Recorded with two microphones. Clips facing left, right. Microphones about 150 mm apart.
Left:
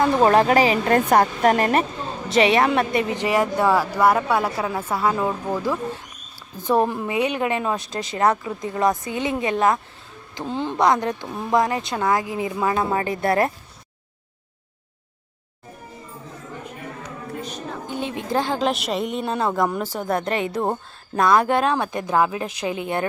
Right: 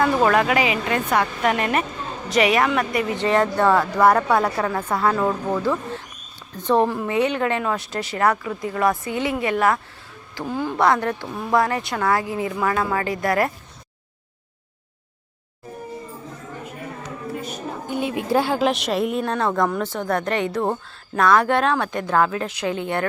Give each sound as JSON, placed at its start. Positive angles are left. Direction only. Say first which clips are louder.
{"t": 0.3, "sound": "speech", "louder": "left 3 dB", "side_deg": 35}
{"t": 2.3, "sound": "speech", "louder": "left 1 dB", "side_deg": 30}
{"t": 3.2, "sound": "speech", "louder": "right 4 dB", "side_deg": 10}
{"t": 17.4, "sound": "a woman's voice", "louder": "right 1 dB", "side_deg": -10}